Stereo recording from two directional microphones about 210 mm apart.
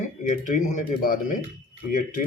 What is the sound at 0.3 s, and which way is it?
Speech, 35° left (ahead or behind).